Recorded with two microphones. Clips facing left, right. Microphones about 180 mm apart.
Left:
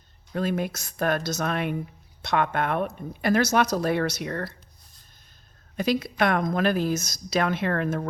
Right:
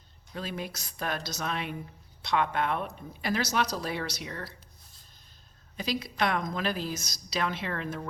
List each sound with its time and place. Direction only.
0.3 s speech: 55° left (ahead or behind)
5.7 s speech: 50° left (ahead or behind)